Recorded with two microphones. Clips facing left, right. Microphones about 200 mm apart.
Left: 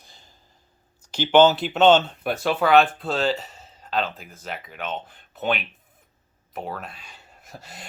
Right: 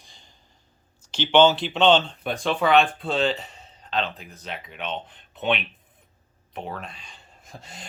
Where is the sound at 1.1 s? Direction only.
10° left (ahead or behind).